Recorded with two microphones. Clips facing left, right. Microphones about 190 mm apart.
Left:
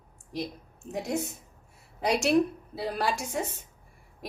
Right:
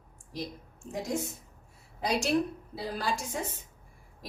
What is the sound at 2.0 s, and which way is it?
A woman's voice, 70° left (ahead or behind).